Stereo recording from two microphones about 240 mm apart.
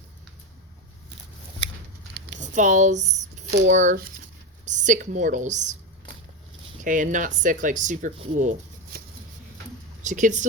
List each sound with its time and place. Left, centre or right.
2.4 s a woman's voice: right
6.8 s speech: right
10.0 s speech: right